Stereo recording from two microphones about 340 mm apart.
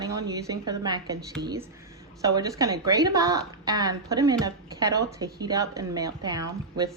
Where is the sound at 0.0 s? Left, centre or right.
Centre.